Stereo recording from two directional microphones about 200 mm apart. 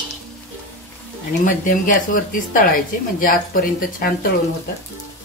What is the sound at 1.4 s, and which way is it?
Speech, 45° left (ahead or behind).